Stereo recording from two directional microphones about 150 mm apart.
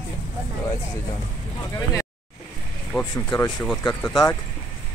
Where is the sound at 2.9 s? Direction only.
Centre (ahead or behind).